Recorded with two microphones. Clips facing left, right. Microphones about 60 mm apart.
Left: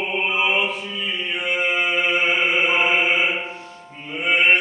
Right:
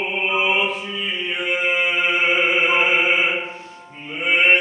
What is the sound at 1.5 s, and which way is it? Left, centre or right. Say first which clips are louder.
Chant: right 1 dB; centre.